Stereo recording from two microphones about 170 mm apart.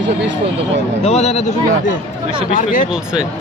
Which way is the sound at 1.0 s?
40° left (ahead or behind).